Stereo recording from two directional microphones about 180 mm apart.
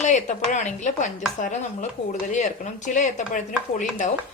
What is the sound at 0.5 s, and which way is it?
A woman's voice, 40° left (ahead or behind).